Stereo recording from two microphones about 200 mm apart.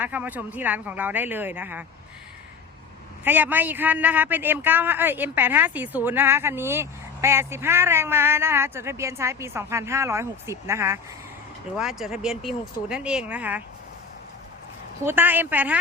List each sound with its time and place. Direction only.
0.0 s a man's voice: 10° right (ahead or behind)
3.2 s a man's voice: 10° right (ahead or behind)
11.8 s speech: centre (ahead or behind)
15.0 s a man's voice: 10° right (ahead or behind)